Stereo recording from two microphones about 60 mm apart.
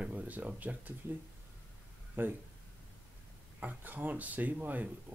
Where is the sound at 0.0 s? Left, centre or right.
Right.